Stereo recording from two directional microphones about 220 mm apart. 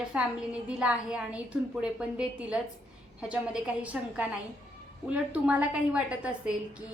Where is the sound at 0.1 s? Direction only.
5° right (ahead or behind).